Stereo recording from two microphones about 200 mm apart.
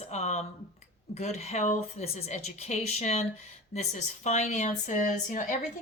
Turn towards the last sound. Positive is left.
turn(degrees=40)  # may be behind; listen again after turning